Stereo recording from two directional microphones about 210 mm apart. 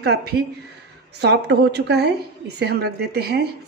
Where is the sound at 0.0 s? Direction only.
50° right (ahead or behind).